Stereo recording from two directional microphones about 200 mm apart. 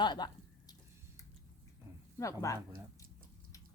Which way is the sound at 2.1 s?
15° left (ahead or behind).